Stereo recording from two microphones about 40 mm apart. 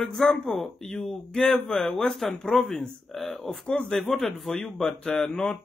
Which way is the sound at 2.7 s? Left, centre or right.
Centre.